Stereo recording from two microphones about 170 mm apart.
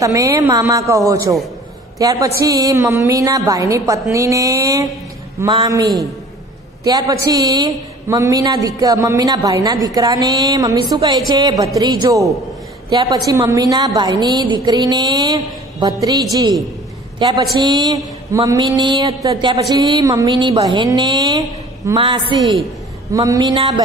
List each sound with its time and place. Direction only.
0.0 s a woman's voice: 20° right (ahead or behind)